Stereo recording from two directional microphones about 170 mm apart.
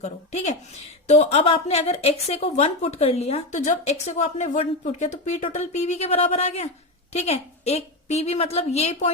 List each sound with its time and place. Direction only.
0.0 s a woman's voice: 40° left (ahead or behind)